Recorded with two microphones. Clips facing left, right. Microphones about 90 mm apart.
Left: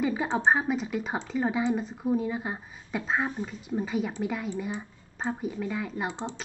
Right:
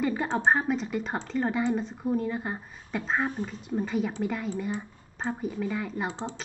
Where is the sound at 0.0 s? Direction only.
Centre (ahead or behind).